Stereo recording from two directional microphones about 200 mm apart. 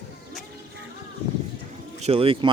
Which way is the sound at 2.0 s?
30° right (ahead or behind).